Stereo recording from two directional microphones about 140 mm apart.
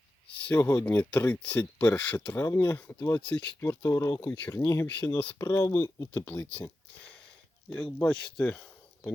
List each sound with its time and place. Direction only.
0.4 s speech: 15° left (ahead or behind)
3.7 s speech: 20° left (ahead or behind)
7.7 s speech: 10° left (ahead or behind)